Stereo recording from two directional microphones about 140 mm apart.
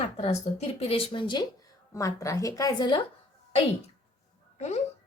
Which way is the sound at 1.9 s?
25° left (ahead or behind).